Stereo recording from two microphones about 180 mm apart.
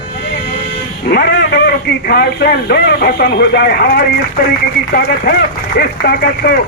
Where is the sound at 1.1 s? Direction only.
60° left (ahead or behind).